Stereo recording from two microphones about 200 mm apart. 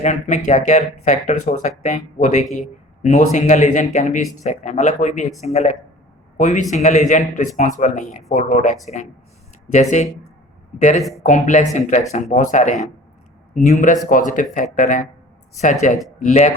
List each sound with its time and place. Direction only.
0.0 s a man's voice: 35° left (ahead or behind)
10.8 s speech: 35° left (ahead or behind)